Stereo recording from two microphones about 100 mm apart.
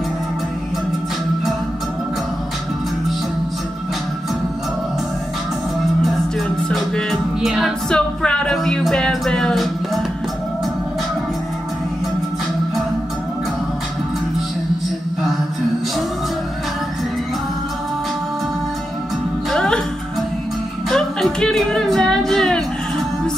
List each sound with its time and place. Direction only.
6.7 s music: centre (ahead or behind)
7.9 s music: 10° left (ahead or behind)
19.5 s music: 5° left (ahead or behind)
20.9 s music: 5° left (ahead or behind)